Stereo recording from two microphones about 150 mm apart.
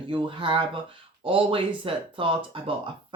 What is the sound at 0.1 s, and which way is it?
Speech, 35° right (ahead or behind).